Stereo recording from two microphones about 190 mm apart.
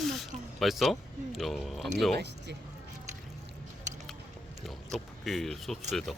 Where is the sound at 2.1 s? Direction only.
60° right (ahead or behind).